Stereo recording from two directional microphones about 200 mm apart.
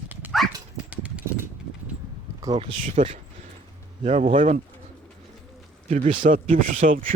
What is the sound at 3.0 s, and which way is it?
Speech, 35° right (ahead or behind).